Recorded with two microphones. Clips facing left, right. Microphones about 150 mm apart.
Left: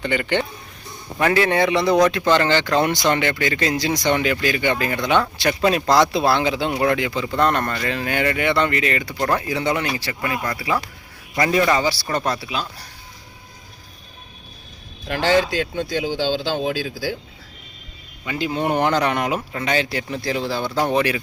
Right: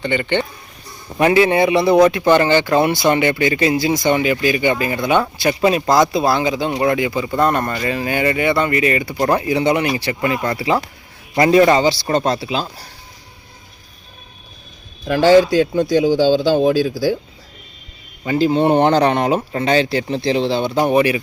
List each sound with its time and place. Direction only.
0.0 s speech: centre (ahead or behind)
1.2 s speech: 15° right (ahead or behind); by 12.9 s 30° right (ahead or behind)
15.0 s speech: 40° right (ahead or behind)
18.3 s speech: 35° right (ahead or behind); by 21.2 s 10° right (ahead or behind)